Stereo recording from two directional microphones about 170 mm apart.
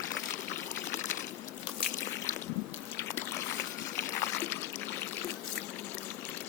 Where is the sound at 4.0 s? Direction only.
15° left (ahead or behind).